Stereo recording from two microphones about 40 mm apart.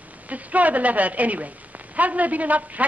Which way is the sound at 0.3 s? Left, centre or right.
Right.